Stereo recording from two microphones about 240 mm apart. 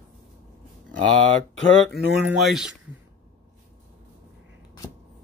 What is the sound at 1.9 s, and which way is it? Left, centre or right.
Speech, centre.